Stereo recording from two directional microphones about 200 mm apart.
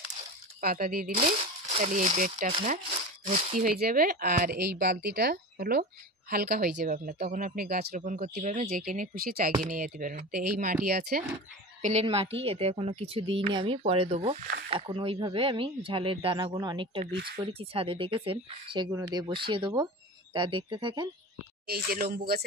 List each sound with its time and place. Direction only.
0.6 s speech: 45° right (ahead or behind)
1.1 s speech: 30° right (ahead or behind); by 11.2 s 50° right (ahead or behind)
11.8 s speech: 30° right (ahead or behind)
21.6 s speech: 50° right (ahead or behind)